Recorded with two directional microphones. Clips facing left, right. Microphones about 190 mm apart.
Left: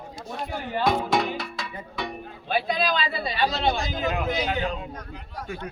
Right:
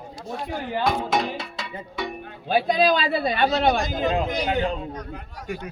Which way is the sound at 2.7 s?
45° right (ahead or behind).